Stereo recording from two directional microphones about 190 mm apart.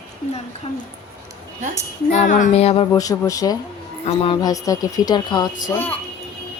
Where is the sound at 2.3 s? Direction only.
35° left (ahead or behind).